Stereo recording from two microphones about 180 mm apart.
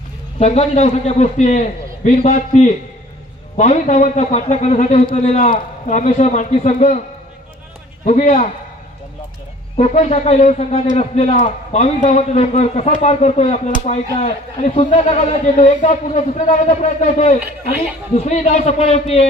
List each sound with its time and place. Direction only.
0.3 s a man's voice: 35° left (ahead or behind)
8.0 s a man's voice: 40° left (ahead or behind)
9.7 s a man's voice: 40° left (ahead or behind)